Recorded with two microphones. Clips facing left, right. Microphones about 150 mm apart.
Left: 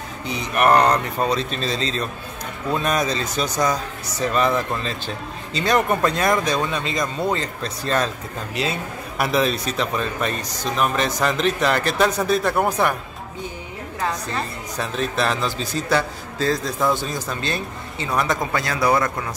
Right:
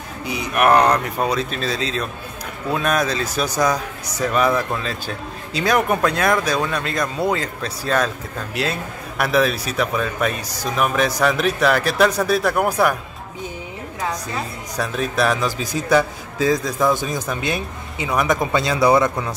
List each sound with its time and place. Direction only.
0.2 s speech: 5° right (ahead or behind)
9.2 s speech: centre (ahead or behind)
14.0 s speech: 5° right (ahead or behind)